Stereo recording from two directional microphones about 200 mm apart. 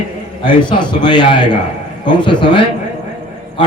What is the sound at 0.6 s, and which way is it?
A man's voice, 25° left (ahead or behind).